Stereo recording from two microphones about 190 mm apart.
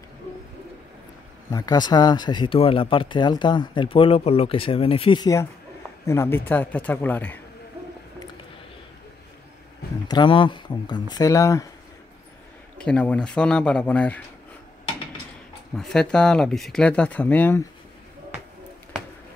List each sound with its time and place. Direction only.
1.5 s a man's voice: 20° left (ahead or behind)
10.0 s speech: 25° left (ahead or behind)
12.8 s speech: 5° left (ahead or behind)
15.7 s speech: 5° left (ahead or behind)